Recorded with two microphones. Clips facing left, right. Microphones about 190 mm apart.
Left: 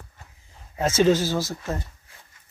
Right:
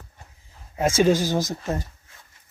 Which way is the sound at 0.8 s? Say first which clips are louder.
Even; 10° right (ahead or behind).